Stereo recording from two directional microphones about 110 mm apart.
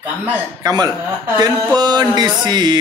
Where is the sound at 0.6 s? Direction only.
35° right (ahead or behind).